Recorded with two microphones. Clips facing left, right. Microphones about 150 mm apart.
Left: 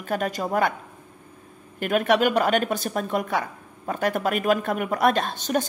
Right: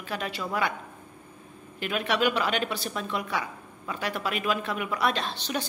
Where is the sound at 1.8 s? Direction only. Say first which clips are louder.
Left 6 dB; 50° left (ahead or behind).